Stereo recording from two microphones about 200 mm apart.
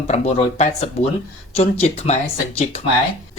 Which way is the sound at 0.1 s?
35° left (ahead or behind).